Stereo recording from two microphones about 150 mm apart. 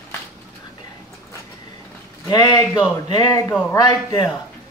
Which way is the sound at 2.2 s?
25° left (ahead or behind).